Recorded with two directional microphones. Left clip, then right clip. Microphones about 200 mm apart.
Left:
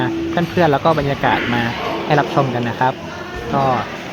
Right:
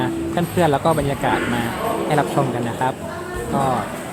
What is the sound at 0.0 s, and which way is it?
A man's voice, 20° left (ahead or behind).